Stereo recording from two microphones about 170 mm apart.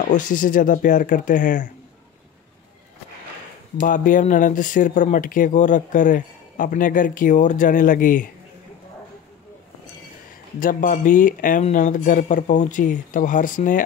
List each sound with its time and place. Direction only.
0.1 s speech: 50° left (ahead or behind)
3.8 s speech: 50° left (ahead or behind)
10.6 s speech: 50° left (ahead or behind)